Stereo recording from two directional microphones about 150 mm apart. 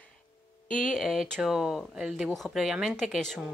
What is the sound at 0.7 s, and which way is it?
Speech, centre (ahead or behind).